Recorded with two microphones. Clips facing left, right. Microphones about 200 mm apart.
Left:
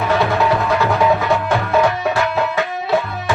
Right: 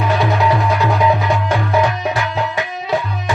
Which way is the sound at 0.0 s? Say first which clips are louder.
Even; 15° right (ahead or behind).